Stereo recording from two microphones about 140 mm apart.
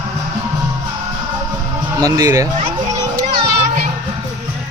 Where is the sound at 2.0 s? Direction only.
25° right (ahead or behind).